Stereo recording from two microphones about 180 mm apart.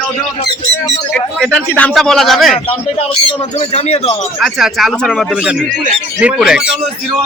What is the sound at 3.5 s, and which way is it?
Speech, 35° left (ahead or behind).